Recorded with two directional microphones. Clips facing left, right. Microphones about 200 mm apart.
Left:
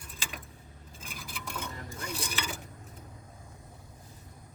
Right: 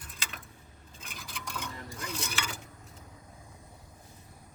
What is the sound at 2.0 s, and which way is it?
Dishes, 10° left (ahead or behind).